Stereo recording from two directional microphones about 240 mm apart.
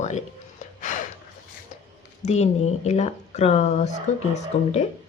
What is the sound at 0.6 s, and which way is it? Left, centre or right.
Gasp, left.